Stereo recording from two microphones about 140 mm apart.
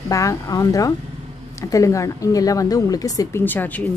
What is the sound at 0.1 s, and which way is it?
Speech, 25° left (ahead or behind).